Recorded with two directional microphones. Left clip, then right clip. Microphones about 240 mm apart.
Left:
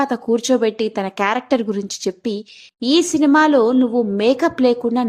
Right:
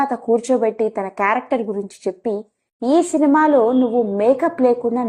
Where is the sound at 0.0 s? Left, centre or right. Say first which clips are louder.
Right 1 dB; left.